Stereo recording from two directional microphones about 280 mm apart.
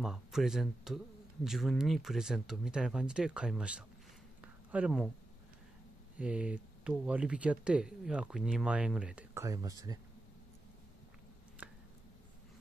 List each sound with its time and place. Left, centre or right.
0.0 s speech: centre
6.1 s speech: centre